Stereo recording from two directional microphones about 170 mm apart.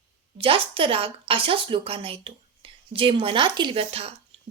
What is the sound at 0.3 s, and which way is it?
A woman's voice, 30° right (ahead or behind).